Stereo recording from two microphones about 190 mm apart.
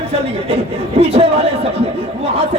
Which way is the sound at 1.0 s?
30° right (ahead or behind).